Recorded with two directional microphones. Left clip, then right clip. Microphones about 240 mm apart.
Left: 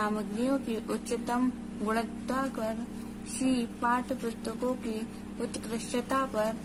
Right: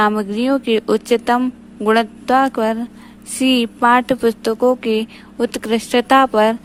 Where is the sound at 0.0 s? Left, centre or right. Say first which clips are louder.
Right 15 dB; right.